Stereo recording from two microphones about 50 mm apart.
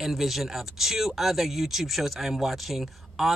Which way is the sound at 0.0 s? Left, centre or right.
Centre.